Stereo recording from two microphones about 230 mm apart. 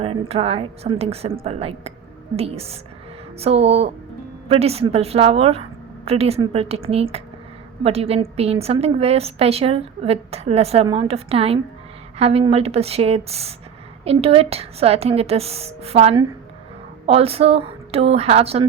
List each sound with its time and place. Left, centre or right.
0.0 s a woman's voice: right